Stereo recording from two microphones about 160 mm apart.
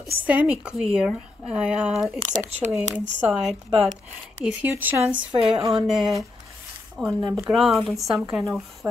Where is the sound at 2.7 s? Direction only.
5° right (ahead or behind).